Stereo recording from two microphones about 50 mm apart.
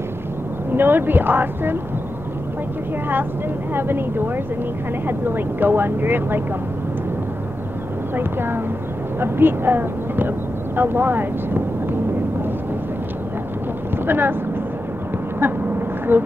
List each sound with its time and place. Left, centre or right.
0.7 s speech: right
3.7 s speech: right
8.2 s speech: right
14.0 s speech: right
16.1 s speech: right